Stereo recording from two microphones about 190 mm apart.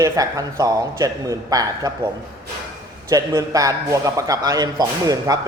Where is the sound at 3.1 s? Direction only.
20° right (ahead or behind).